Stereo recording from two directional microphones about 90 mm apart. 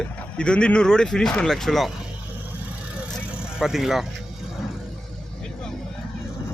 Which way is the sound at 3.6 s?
5° right (ahead or behind).